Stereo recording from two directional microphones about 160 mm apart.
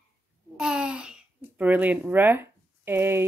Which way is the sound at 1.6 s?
10° right (ahead or behind).